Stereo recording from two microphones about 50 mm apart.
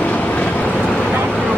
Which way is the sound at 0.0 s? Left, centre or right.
Left.